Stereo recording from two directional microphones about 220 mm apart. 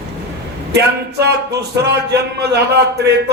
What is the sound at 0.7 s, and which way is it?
A man's voice, 50° right (ahead or behind).